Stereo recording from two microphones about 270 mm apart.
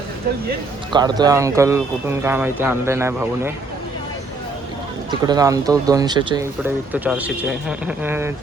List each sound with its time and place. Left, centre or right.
0.9 s speech: centre
5.2 s speech: centre